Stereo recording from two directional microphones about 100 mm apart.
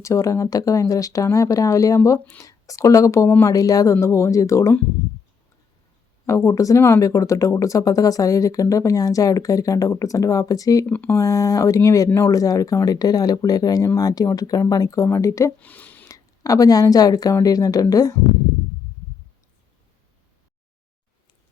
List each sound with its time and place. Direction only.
0.0 s speech: 30° left (ahead or behind)
6.2 s speech: 30° left (ahead or behind)
10.8 s speech: 15° left (ahead or behind)
11.2 s speech: 30° left (ahead or behind)
15.6 s a sound: 15° left (ahead or behind)
16.0 s speech: 35° left (ahead or behind)